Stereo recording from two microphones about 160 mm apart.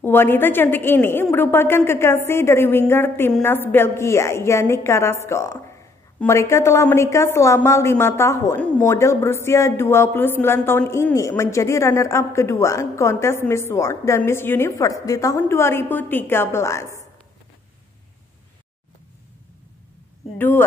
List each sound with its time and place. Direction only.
0.0 s speech: 15° left (ahead or behind)
20.3 s speech: 15° left (ahead or behind)